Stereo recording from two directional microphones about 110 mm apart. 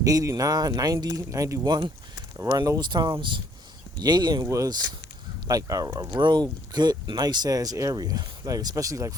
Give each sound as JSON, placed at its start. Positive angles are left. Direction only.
{"t": 0.0, "sound": "speech", "side_deg": -35}
{"t": 1.6, "sound": "speech", "side_deg": -40}
{"t": 6.1, "sound": "speech", "side_deg": -45}